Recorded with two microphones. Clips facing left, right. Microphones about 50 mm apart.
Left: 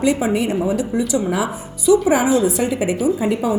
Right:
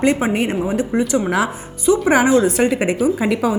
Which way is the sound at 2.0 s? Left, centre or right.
Right.